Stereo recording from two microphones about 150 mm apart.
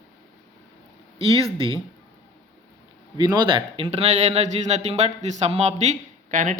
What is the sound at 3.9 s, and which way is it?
Speech, 45° right (ahead or behind).